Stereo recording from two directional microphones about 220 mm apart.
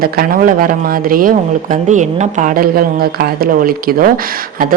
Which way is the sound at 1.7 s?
35° right (ahead or behind).